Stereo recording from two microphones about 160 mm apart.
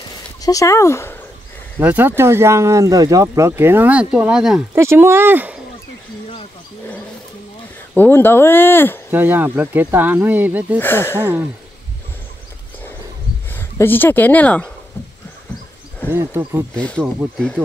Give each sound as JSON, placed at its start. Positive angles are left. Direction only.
{"t": 0.4, "sound": "speech", "side_deg": 20}
{"t": 1.8, "sound": "speech", "side_deg": -10}
{"t": 4.7, "sound": "speech", "side_deg": -15}
{"t": 7.9, "sound": "speech", "side_deg": 10}
{"t": 9.1, "sound": "speech", "side_deg": -10}
{"t": 10.8, "sound": "speech", "side_deg": 15}
{"t": 11.1, "sound": "speech", "side_deg": -15}
{"t": 13.5, "sound": "speech", "side_deg": 15}
{"t": 16.1, "sound": "speech", "side_deg": -15}
{"t": 16.7, "sound": "speech", "side_deg": 5}
{"t": 17.2, "sound": "speech", "side_deg": -10}